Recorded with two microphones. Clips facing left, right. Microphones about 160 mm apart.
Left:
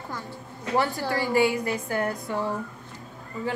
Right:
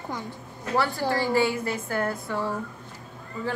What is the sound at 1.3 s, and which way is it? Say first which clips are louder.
Speech: left 1 dB; 15° left (ahead or behind).